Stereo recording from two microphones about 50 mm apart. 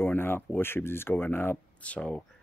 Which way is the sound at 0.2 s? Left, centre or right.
Left.